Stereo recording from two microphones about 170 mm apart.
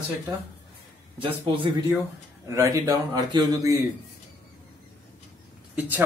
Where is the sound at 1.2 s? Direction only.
30° right (ahead or behind).